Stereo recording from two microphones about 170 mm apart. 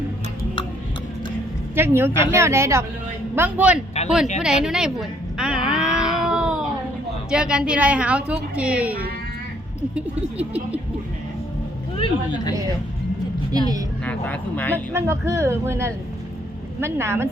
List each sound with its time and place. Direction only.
1.7 s a woman's voice: 15° right (ahead or behind)
4.4 s a sound: 5° right (ahead or behind)
7.3 s a woman's voice: 5° right (ahead or behind)
11.9 s speech: 30° left (ahead or behind)
14.0 s speech: 10° left (ahead or behind)
14.9 s a woman's voice: 15° right (ahead or behind)